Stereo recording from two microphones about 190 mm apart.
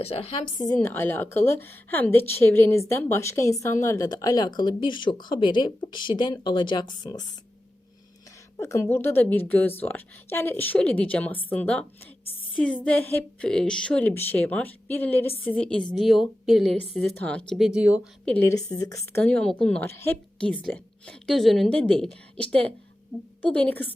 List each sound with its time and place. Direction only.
0.0 s a woman's voice: 30° left (ahead or behind)
8.5 s a woman's voice: 15° left (ahead or behind); by 18.0 s 5° right (ahead or behind)
18.3 s a woman's voice: 10° left (ahead or behind)
18.9 s a woman's voice: 5° left (ahead or behind)